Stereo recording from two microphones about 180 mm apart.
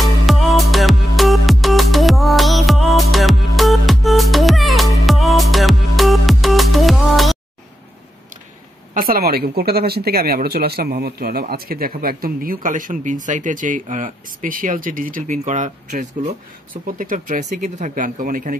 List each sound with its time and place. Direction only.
0.0 s music: centre (ahead or behind)
8.9 s speech: 55° right (ahead or behind)
16.2 s speech: 30° right (ahead or behind)
16.8 s speech: 50° right (ahead or behind)